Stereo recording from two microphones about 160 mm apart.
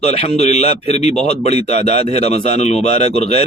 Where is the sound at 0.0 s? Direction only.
40° left (ahead or behind).